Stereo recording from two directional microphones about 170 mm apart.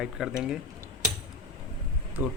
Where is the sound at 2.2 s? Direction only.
10° right (ahead or behind).